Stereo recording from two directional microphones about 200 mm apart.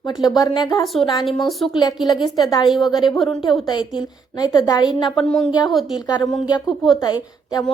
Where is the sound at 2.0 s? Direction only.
20° left (ahead or behind).